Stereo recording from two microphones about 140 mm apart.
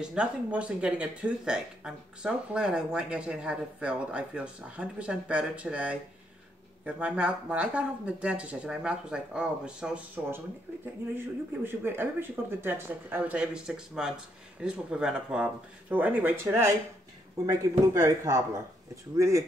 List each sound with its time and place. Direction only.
0.0 s speech: 5° right (ahead or behind)